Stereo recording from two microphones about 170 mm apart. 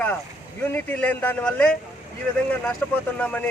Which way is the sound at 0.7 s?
10° left (ahead or behind).